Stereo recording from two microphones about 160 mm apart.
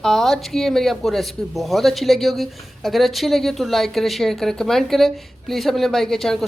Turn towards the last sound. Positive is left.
turn(degrees=0)  # may be behind; listen again after turning